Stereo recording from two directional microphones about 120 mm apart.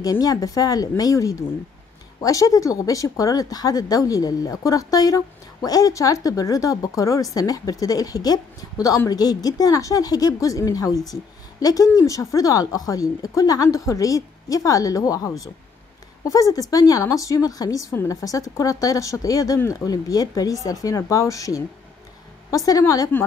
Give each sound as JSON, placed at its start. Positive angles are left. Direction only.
{"t": 0.0, "sound": "a woman's voice", "side_deg": 30}
{"t": 22.7, "sound": "a woman's voice", "side_deg": 30}